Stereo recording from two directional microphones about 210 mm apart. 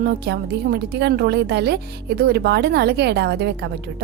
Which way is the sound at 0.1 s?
50° right (ahead or behind).